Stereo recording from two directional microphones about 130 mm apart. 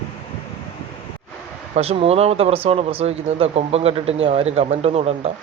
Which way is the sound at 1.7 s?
50° right (ahead or behind).